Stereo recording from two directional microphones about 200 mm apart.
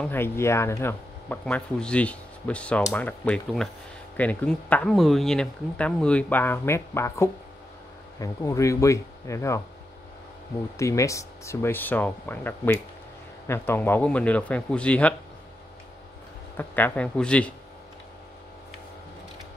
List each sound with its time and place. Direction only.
0.0 s speech: 10° left (ahead or behind)
10.8 s speech: 15° left (ahead or behind)
16.5 s speech: 10° left (ahead or behind)